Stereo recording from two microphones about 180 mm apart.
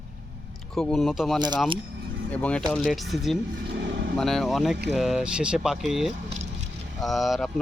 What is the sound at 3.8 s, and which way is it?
Vehicle, 70° right (ahead or behind).